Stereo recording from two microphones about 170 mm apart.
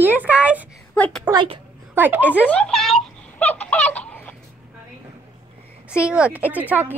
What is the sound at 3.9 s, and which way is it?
Fowl, 10° left (ahead or behind).